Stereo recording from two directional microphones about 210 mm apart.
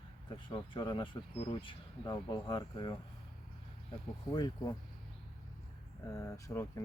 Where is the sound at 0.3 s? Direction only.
20° left (ahead or behind).